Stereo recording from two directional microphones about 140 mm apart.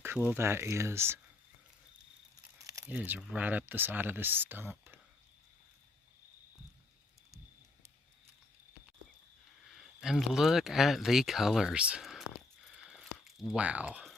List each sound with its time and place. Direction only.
0.0 s speech: 15° right (ahead or behind)
2.6 s crumpling: 25° right (ahead or behind)
2.9 s speech: 10° right (ahead or behind)
9.6 s speech: centre (ahead or behind)